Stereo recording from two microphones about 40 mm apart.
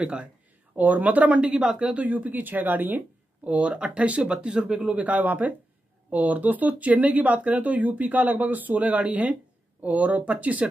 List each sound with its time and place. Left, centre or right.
0.0 s speech: right
0.7 s speech: right
2.0 s speech: right
3.4 s speech: right